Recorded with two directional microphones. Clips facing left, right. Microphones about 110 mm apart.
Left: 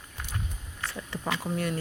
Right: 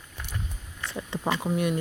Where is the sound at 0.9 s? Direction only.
25° right (ahead or behind).